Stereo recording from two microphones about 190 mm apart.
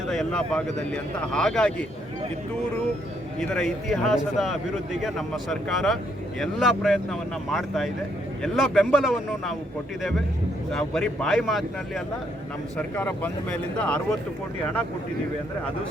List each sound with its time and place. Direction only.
0.1 s speech: 5° left (ahead or behind)
3.5 s speech: centre (ahead or behind)